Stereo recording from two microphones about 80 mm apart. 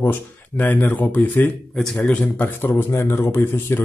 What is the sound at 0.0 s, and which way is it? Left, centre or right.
Speech, left.